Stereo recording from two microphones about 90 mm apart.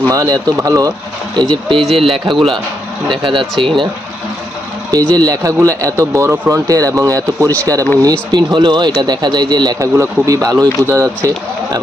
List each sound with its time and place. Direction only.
0.1 s speech: 40° right (ahead or behind)
1.4 s speech: 55° right (ahead or behind)
2.1 s speech: 80° right
4.9 s speech: 45° right (ahead or behind)
8.0 s speech: 50° right (ahead or behind)
9.8 s speech: 40° right (ahead or behind)